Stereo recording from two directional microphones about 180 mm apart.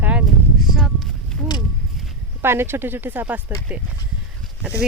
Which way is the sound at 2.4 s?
15° right (ahead or behind).